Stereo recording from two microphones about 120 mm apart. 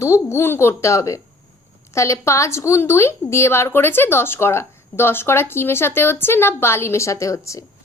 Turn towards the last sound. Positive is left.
turn(degrees=25)  # may be behind; listen again after turning